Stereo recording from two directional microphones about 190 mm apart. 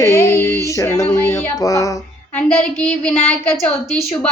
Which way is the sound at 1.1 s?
20° left (ahead or behind).